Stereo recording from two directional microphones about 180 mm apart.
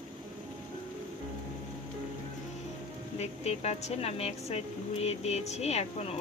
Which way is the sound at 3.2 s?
35° left (ahead or behind).